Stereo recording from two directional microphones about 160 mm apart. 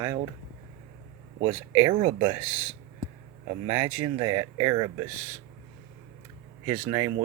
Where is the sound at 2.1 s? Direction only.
25° right (ahead or behind).